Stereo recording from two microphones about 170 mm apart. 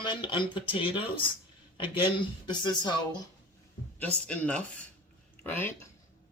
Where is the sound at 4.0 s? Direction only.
5° left (ahead or behind).